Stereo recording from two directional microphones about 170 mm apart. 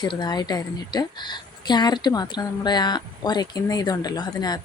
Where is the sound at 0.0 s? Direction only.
25° left (ahead or behind).